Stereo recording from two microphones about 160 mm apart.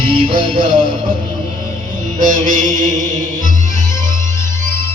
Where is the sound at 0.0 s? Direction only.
30° right (ahead or behind).